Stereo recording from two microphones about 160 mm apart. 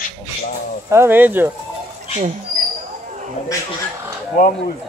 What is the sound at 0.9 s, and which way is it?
Speech, 15° right (ahead or behind).